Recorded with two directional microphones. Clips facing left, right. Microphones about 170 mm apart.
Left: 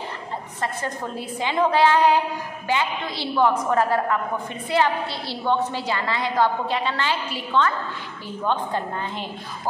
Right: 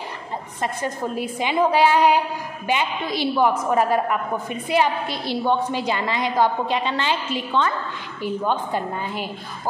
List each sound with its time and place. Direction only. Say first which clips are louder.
0.6 s a woman's voice: right 3 dB; 10° right (ahead or behind)